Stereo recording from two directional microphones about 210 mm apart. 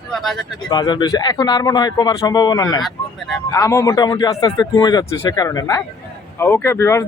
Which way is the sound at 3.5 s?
15° left (ahead or behind).